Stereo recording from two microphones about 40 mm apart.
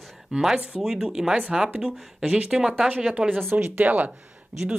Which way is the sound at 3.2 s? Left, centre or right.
Right.